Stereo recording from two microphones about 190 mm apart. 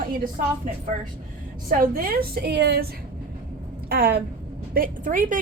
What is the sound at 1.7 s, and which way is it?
A woman's voice, 50° right (ahead or behind).